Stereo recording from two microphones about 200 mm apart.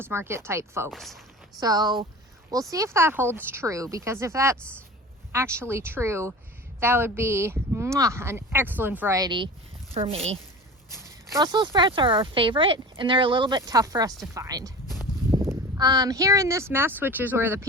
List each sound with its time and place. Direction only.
0.0 s speech: 10° right (ahead or behind)
0.9 s speech: centre (ahead or behind)
1.5 s speech: 20° right (ahead or behind)
10.9 s speech: 20° right (ahead or behind)